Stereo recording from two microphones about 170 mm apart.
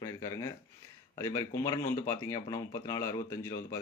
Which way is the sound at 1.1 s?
20° left (ahead or behind).